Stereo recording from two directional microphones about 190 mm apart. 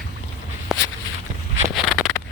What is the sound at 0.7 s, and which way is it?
Walk, centre (ahead or behind).